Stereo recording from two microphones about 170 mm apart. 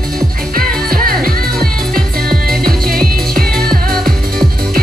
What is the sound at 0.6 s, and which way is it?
Music, 60° right (ahead or behind).